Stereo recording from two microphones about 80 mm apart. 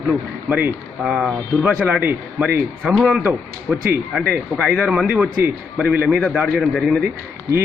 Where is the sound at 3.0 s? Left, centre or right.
Centre.